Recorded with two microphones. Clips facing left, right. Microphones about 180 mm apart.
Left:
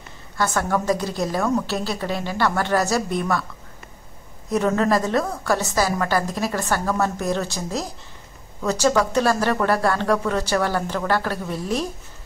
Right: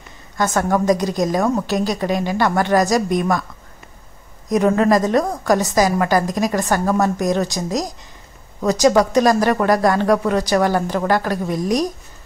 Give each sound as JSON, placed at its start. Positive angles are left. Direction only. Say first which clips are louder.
{"t": 0.4, "sound": "a woman's voice", "louder": "right 4 dB", "side_deg": -15}
{"t": 4.5, "sound": "a woman's voice", "louder": "right 5 dB", "side_deg": -15}